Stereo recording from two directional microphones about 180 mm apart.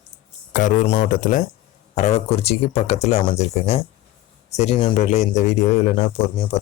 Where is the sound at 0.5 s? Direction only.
40° left (ahead or behind).